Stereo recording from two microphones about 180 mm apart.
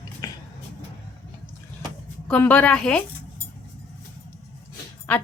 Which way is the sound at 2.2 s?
10° left (ahead or behind).